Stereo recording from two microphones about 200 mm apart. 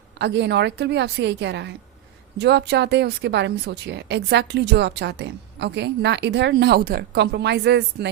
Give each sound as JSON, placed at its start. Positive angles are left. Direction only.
{"t": 0.2, "sound": "a woman's voice", "side_deg": -60}